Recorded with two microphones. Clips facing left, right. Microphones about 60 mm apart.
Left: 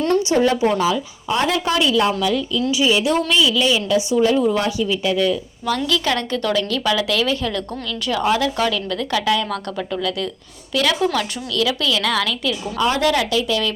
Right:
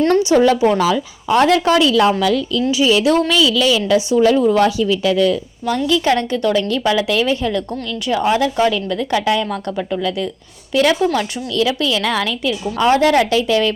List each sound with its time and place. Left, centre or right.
0.3 s speech: right
0.8 s a woman's voice: right
5.6 s a woman's voice: right